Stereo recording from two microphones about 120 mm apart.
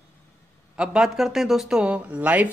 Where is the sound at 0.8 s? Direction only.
5° right (ahead or behind).